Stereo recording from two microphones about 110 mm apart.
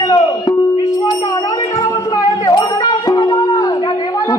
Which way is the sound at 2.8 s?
40° left (ahead or behind).